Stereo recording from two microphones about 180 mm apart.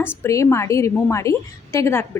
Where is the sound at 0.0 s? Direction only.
15° left (ahead or behind).